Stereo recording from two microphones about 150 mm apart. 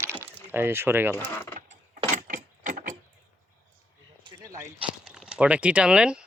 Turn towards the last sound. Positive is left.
turn(degrees=-5)  # may be behind; listen again after turning